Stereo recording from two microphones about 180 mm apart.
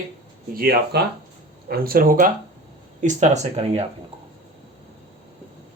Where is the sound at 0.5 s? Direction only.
55° right (ahead or behind).